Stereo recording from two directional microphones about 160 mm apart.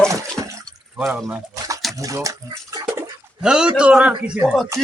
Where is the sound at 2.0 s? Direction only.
20° right (ahead or behind).